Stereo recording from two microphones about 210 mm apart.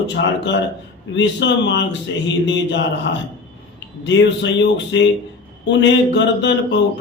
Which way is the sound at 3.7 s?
60° left (ahead or behind).